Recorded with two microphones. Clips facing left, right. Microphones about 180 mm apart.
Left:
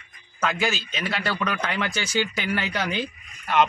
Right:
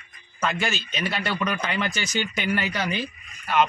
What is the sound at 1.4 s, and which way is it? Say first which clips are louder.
Speech: even; 10° right (ahead or behind).